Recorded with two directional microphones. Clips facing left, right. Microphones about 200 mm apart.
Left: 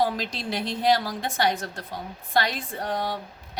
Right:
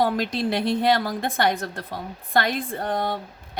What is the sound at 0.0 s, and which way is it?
A woman's voice, 55° right (ahead or behind).